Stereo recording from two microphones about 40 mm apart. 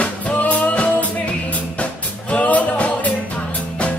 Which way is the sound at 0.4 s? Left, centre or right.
Left.